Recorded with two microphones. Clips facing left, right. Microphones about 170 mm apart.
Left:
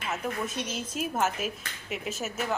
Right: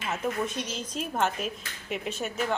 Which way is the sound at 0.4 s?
5° left (ahead or behind).